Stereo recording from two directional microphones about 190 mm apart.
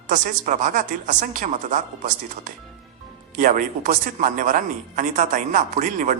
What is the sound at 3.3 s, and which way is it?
Speech, 45° right (ahead or behind).